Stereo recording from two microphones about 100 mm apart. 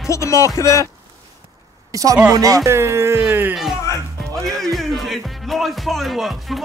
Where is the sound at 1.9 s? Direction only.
35° right (ahead or behind).